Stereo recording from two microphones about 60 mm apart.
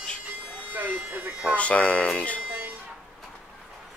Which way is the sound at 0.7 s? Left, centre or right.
Right.